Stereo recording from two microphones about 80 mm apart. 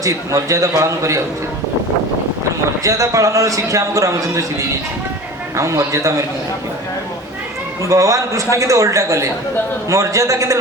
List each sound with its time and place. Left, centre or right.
0.0 s a man's voice: right
2.8 s a man's voice: right
5.5 s a man's voice: right
7.8 s a man's voice: right